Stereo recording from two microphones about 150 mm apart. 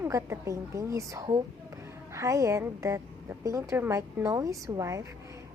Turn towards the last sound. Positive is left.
turn(degrees=-20)  # may be behind; listen again after turning